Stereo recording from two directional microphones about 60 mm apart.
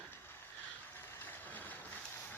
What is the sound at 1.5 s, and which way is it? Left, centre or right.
Vehicle, left.